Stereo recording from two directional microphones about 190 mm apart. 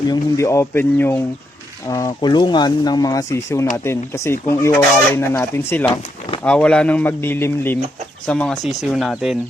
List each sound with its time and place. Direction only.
0.1 s speech: 15° left (ahead or behind); by 9.4 s centre (ahead or behind)